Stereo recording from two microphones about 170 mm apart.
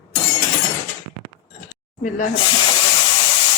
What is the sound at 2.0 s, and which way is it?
Speech, 50° left (ahead or behind).